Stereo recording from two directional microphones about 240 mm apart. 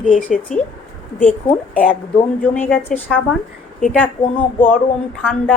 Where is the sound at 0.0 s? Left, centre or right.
Centre.